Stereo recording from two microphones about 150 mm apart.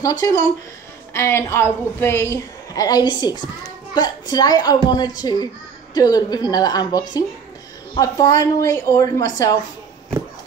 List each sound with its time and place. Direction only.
0.0 s a woman's voice: 25° left (ahead or behind)